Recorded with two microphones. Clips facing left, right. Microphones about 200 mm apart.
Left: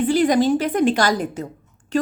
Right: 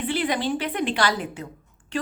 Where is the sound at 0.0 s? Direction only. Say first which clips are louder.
Left 9 dB; 45° left (ahead or behind).